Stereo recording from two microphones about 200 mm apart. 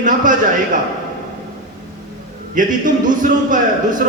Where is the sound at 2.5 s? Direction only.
40° right (ahead or behind).